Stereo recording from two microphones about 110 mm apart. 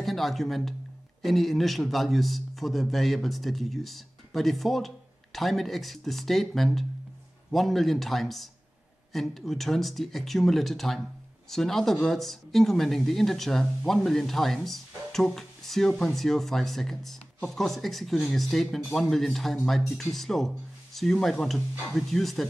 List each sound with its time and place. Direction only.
0.0 s a man's voice: centre (ahead or behind)